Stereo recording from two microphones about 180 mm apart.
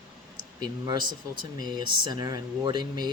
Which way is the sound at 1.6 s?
25° right (ahead or behind).